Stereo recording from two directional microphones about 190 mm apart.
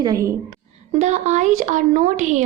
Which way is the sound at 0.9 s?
35° right (ahead or behind).